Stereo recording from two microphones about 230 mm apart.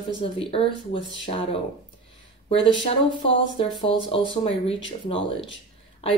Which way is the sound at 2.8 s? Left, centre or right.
Left.